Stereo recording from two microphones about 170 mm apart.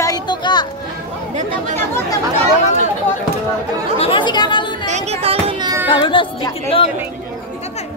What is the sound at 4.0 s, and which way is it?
Speech, 30° left (ahead or behind).